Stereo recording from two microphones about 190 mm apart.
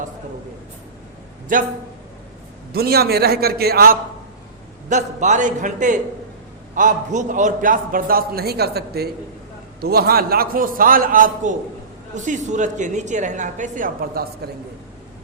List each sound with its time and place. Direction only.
1.5 s a man's voice: 45° right (ahead or behind)
2.7 s a man's voice: 55° right (ahead or behind)
4.9 s a woman's voice: 40° right (ahead or behind)